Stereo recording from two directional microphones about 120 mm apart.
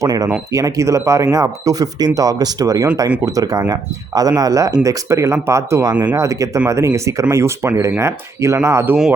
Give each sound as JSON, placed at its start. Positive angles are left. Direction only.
{"t": 0.0, "sound": "speech", "side_deg": -30}